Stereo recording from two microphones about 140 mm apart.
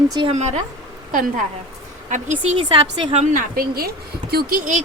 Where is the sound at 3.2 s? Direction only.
80° right.